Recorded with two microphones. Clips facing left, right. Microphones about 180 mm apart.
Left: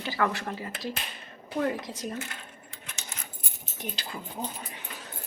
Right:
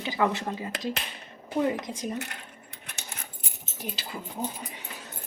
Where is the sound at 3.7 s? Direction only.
5° right (ahead or behind).